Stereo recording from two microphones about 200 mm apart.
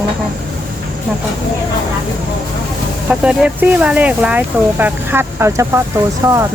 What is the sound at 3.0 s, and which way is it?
Speech, 5° right (ahead or behind).